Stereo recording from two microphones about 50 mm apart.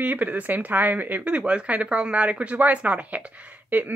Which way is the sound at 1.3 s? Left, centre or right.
Right.